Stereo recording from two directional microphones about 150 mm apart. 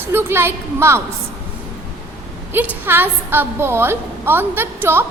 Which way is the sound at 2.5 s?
10° right (ahead or behind).